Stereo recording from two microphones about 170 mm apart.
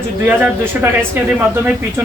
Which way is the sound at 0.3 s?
10° right (ahead or behind).